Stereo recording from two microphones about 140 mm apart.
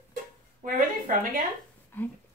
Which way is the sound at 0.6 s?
70° right (ahead or behind).